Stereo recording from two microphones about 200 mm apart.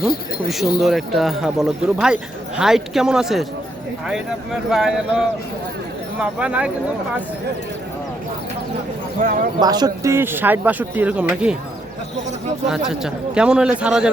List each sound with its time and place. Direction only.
0.4 s speech: centre (ahead or behind)
4.7 s speech: 5° right (ahead or behind)
9.2 s speech: 40° right (ahead or behind)
9.6 s speech: 20° right (ahead or behind)
12.6 s speech: centre (ahead or behind)